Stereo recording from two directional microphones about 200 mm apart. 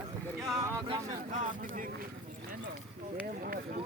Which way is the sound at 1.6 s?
40° right (ahead or behind).